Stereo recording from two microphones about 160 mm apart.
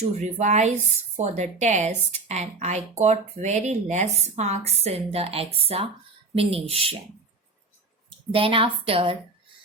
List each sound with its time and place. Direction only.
0.0 s a woman's voice: 45° right (ahead or behind)
8.3 s a woman's voice: 35° right (ahead or behind)